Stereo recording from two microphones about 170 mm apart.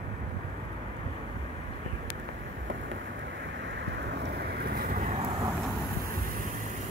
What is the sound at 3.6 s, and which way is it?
Vehicle, 90° right.